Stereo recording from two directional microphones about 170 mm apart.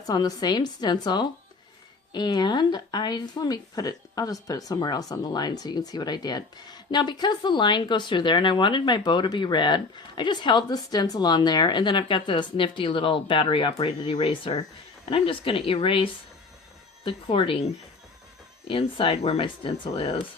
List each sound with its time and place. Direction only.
0.0 s speech: 20° left (ahead or behind)
18.7 s speech: 30° left (ahead or behind)